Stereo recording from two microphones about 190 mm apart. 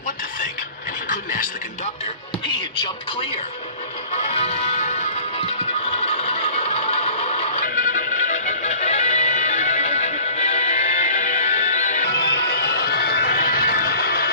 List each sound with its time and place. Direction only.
1.0 s speech: 45° left (ahead or behind)
4.1 s music: 35° left (ahead or behind)
12.1 s music: 60° left (ahead or behind)